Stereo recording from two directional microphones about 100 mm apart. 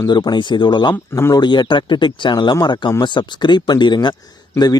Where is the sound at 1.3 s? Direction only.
50° left (ahead or behind).